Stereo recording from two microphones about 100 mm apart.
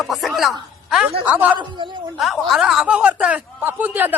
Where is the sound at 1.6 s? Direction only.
50° right (ahead or behind).